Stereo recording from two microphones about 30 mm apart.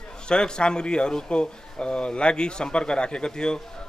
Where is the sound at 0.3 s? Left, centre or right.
Left.